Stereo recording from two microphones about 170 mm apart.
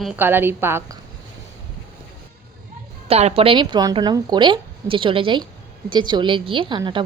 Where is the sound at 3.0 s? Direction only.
35° right (ahead or behind).